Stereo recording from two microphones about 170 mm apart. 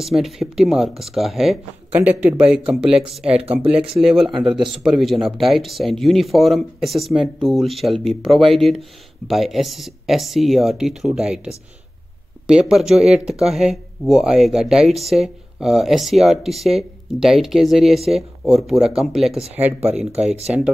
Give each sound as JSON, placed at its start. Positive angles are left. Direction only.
{"t": 0.0, "sound": "speech", "side_deg": 0}
{"t": 19.9, "sound": "speech", "side_deg": -40}